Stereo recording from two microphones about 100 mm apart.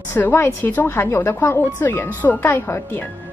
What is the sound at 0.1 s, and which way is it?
A woman's voice, 25° left (ahead or behind).